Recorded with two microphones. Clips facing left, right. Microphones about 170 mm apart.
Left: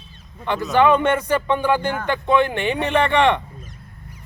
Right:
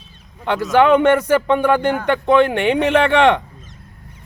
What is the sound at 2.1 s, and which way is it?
Speech, 65° right (ahead or behind).